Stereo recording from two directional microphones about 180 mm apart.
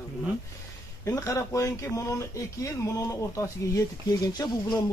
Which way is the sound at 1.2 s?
20° left (ahead or behind).